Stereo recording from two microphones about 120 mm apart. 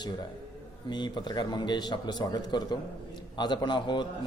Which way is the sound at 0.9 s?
40° left (ahead or behind).